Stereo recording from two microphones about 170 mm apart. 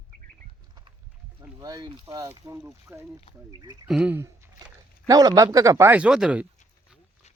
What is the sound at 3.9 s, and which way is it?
Speech, 5° right (ahead or behind).